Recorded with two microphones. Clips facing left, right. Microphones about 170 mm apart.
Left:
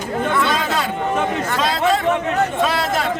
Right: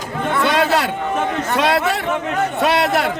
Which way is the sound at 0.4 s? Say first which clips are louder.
Right 4 dB; 70° right (ahead or behind).